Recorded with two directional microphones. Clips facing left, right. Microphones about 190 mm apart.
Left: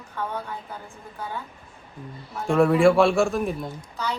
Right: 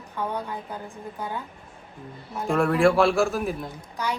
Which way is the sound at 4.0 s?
15° right (ahead or behind).